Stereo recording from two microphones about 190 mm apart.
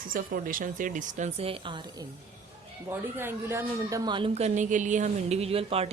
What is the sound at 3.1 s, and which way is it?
Speech, 15° right (ahead or behind).